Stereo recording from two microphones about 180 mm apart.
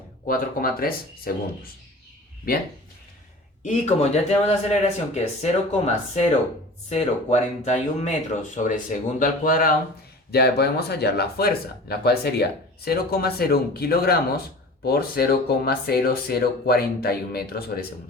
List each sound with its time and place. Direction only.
0.3 s speech: 55° left (ahead or behind)
3.6 s speech: 40° left (ahead or behind)
10.3 s speech: 65° left (ahead or behind)